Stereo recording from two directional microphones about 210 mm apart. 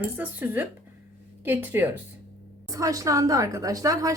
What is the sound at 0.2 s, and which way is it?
A woman's voice, 10° right (ahead or behind).